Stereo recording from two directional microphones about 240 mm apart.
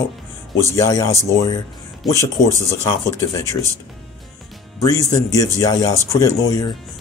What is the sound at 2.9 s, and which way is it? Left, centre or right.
Speech, centre.